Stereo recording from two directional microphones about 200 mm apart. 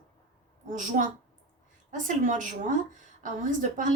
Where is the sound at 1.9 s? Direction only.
40° right (ahead or behind).